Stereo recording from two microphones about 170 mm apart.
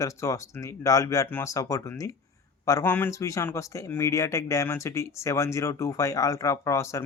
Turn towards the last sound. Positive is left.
turn(degrees=15)  # may be behind; listen again after turning